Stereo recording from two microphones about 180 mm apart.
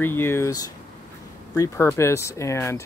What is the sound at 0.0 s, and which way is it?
Speech, 15° left (ahead or behind).